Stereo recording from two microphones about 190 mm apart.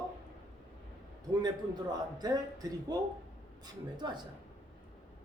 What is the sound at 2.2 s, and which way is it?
Speech, 20° right (ahead or behind).